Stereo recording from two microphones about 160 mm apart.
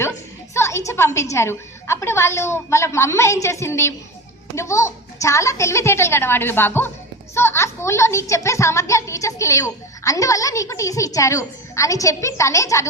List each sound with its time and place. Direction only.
0.5 s a woman's voice: 20° left (ahead or behind)